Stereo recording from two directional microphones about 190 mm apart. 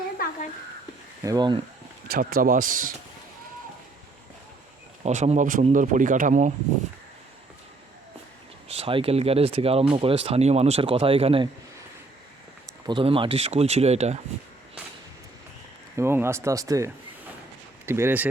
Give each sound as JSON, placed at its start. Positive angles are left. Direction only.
{"t": 1.2, "sound": "speech", "side_deg": -20}
{"t": 2.0, "sound": "speech", "side_deg": -50}
{"t": 5.0, "sound": "speech", "side_deg": -35}
{"t": 8.7, "sound": "speech", "side_deg": -30}
{"t": 12.9, "sound": "speech", "side_deg": -30}
{"t": 16.0, "sound": "speech", "side_deg": -15}